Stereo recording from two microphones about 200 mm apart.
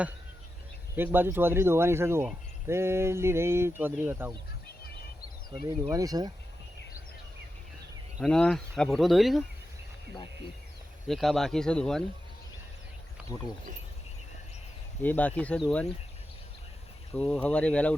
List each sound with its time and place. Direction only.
0.9 s speech: 10° right (ahead or behind)
5.9 s speech: 15° right (ahead or behind)
8.2 s speech: 5° left (ahead or behind)
11.1 s speech: centre (ahead or behind)
13.3 s speech: 20° left (ahead or behind)
15.0 s speech: 10° left (ahead or behind)
17.2 s speech: 5° left (ahead or behind)